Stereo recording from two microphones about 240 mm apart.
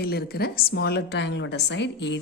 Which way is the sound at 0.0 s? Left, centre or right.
Left.